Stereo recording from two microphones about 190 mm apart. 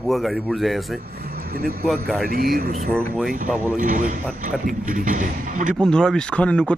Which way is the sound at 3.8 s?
45° right (ahead or behind).